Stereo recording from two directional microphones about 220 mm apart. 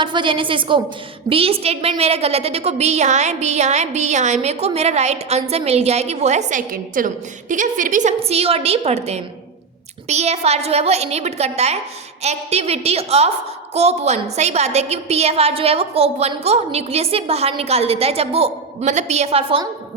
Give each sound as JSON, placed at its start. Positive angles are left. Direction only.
{"t": 0.0, "sound": "a woman's voice", "side_deg": -20}